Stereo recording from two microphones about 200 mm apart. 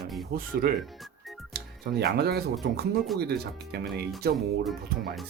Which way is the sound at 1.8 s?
55° right (ahead or behind).